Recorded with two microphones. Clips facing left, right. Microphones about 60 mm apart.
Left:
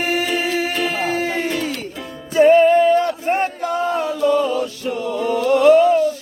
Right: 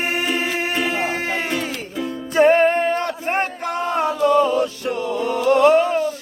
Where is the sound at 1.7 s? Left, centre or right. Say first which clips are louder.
Right 2 dB; centre.